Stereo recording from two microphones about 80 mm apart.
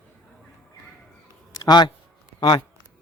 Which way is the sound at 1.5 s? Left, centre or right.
Left.